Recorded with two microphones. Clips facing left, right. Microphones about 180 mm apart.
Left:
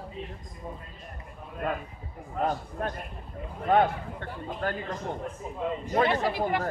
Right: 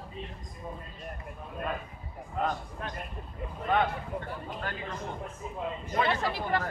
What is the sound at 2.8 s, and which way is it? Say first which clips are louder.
Speech: left 7 dB; 50° left (ahead or behind).